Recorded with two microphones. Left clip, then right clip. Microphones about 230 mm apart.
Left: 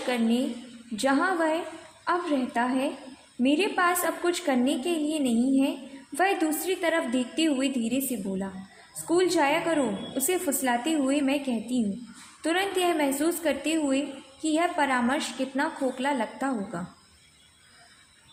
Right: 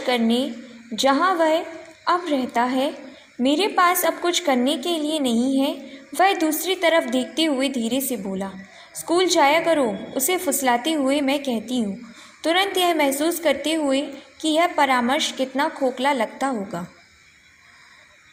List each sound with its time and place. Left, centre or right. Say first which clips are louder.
0.1 s a woman's voice: right 6 dB; centre